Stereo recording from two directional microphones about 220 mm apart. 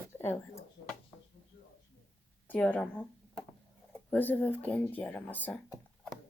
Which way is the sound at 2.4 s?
5° left (ahead or behind).